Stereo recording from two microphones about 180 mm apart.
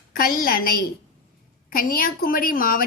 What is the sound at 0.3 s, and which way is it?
A woman's voice, 55° left (ahead or behind).